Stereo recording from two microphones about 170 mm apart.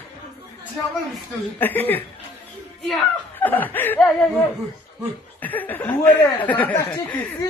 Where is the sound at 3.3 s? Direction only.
10° left (ahead or behind).